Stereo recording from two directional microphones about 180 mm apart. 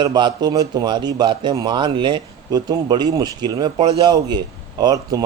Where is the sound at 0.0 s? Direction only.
25° right (ahead or behind).